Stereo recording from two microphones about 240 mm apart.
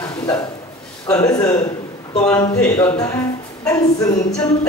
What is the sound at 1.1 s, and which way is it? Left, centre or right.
A woman's voice, centre.